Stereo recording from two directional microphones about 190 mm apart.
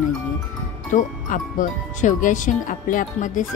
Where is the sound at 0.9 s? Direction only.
45° left (ahead or behind).